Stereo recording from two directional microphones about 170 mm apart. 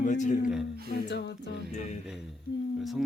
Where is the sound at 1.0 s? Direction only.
90° left.